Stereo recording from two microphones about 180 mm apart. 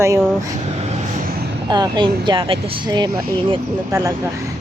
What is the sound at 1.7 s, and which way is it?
Speech, 25° right (ahead or behind).